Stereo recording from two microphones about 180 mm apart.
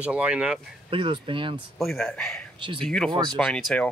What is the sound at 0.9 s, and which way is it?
Speech, 30° right (ahead or behind).